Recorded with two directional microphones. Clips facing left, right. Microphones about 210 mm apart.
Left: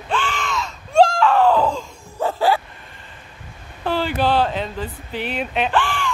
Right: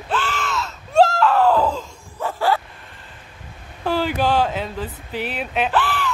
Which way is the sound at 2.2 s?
25° left (ahead or behind).